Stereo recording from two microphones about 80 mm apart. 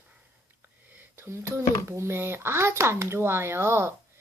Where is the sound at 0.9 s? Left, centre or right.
Right.